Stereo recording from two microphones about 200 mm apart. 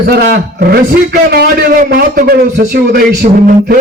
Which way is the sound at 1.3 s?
50° right (ahead or behind).